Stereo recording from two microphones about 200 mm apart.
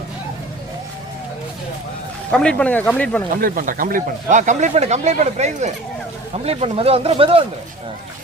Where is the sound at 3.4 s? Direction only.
45° right (ahead or behind); by 7.4 s 30° right (ahead or behind).